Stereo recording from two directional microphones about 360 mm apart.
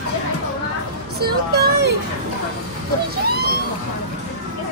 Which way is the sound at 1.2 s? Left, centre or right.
Right.